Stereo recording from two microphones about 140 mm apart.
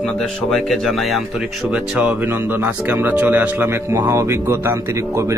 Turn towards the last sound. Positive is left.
turn(degrees=-20)  # may be behind; listen again after turning